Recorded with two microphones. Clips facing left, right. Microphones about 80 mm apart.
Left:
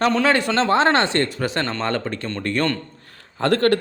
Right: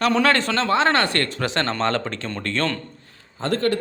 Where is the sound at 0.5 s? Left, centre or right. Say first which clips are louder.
Left 2 dB; left.